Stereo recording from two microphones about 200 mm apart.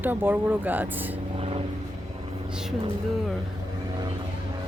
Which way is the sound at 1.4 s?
30° right (ahead or behind).